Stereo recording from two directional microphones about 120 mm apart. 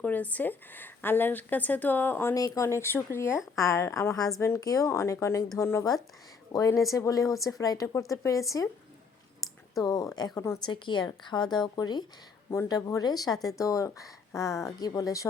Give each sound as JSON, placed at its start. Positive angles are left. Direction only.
{"t": 0.0, "sound": "a woman's voice", "side_deg": 15}
{"t": 2.3, "sound": "speech", "side_deg": 30}
{"t": 9.7, "sound": "speech", "side_deg": 30}
{"t": 10.6, "sound": "speech", "side_deg": 40}